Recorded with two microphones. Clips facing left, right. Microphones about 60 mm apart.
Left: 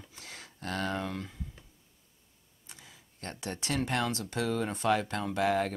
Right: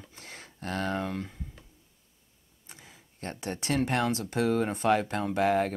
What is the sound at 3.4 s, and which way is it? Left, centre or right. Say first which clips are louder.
Speech: right 4 dB; centre.